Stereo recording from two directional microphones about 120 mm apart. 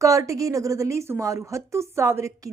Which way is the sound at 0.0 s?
25° right (ahead or behind).